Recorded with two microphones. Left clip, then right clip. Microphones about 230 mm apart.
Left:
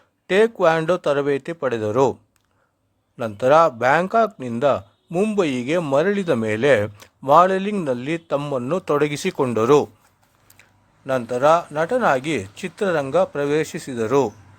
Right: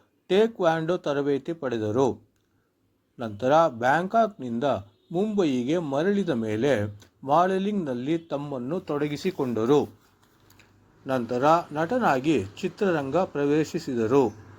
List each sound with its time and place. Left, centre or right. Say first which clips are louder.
0.3 s speech: left 6 dB; left
3.2 s speech: left 6 dB; left
5.1 s speech: left 5 dB; left
8.4 s a man's voice: left 8 dB; left